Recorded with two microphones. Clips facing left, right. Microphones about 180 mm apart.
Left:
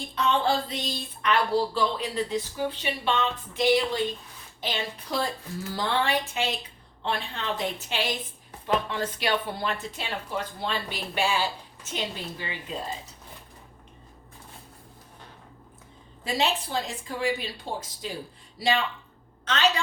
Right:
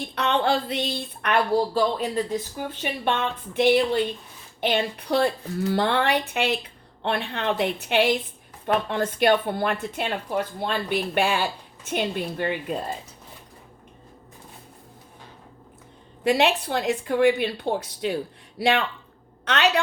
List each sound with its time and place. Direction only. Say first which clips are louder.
0.2 s a woman's voice: right 2 dB; 70° right (ahead or behind)
16.2 s a woman's voice: right 7 dB; 65° right (ahead or behind)